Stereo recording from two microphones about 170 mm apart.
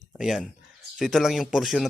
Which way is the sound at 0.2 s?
Centre (ahead or behind).